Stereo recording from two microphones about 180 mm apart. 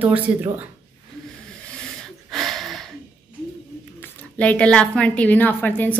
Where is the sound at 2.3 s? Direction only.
Centre (ahead or behind).